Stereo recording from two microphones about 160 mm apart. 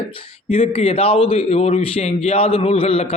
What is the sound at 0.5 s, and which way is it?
Speech, 40° left (ahead or behind).